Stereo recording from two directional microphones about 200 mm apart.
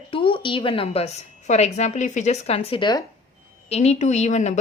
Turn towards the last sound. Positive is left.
turn(degrees=35)  # may be behind; listen again after turning